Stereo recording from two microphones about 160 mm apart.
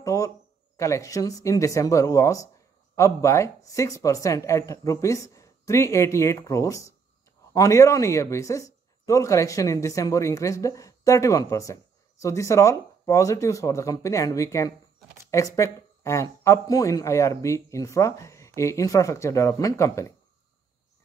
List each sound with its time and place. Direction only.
0.0 s speech: 20° left (ahead or behind)